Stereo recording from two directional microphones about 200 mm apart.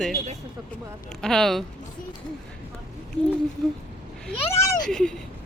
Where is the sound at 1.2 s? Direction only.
5° left (ahead or behind).